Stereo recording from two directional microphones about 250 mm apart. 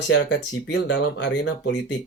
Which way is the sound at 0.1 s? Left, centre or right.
Left.